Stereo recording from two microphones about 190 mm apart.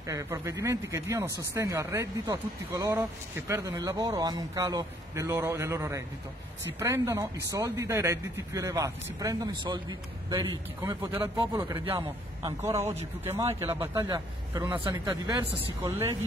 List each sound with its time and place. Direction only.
0.0 s speech: 15° right (ahead or behind)
10.8 s speech: 10° right (ahead or behind)
11.7 s speech: 25° right (ahead or behind)
14.0 s speech: 20° right (ahead or behind)